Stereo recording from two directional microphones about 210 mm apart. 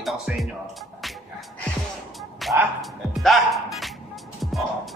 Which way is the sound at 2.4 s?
Centre (ahead or behind).